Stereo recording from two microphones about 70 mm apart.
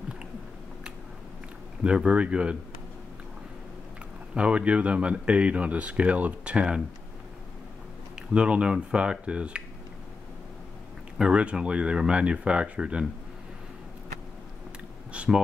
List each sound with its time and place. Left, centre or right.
1.8 s speech: centre
4.4 s speech: centre
8.3 s speech: centre
11.1 s speech: centre
15.1 s a sound: centre